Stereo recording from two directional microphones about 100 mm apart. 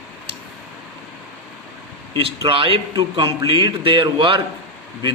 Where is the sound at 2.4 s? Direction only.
60° right (ahead or behind).